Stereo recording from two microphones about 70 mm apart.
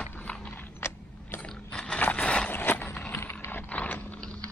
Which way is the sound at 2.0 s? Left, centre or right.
Left.